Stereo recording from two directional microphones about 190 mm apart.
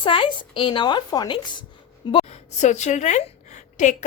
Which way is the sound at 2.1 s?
35° left (ahead or behind).